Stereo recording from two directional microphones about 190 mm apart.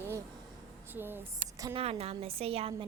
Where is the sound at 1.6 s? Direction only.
30° right (ahead or behind).